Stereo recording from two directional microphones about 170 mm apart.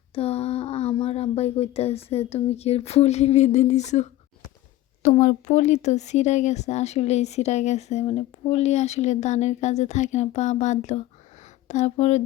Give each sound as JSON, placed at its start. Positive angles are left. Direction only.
{"t": 0.1, "sound": "speech", "side_deg": 35}